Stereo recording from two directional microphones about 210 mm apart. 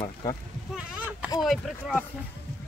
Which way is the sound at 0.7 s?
5° right (ahead or behind).